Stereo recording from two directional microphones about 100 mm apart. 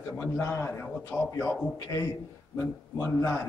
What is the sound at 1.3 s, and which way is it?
Speech, 35° left (ahead or behind).